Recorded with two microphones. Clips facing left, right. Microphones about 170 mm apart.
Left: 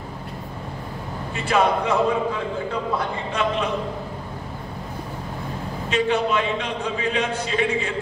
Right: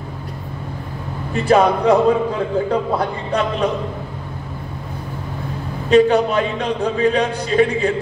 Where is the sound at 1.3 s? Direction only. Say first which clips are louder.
Right 6 dB; 35° right (ahead or behind).